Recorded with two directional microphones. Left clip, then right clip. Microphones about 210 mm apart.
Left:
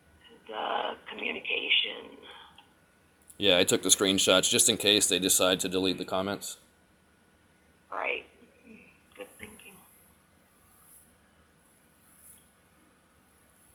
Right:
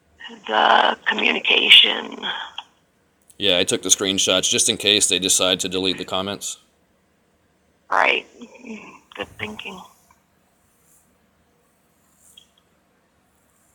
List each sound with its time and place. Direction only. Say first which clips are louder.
0.4 s speech: right 17 dB; 50° right (ahead or behind)
3.3 s speech: right 5 dB; 10° right (ahead or behind)
7.9 s speech: right 15 dB; 50° right (ahead or behind)